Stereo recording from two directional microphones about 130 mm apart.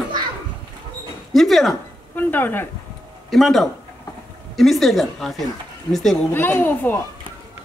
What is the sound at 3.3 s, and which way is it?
Speech, centre (ahead or behind).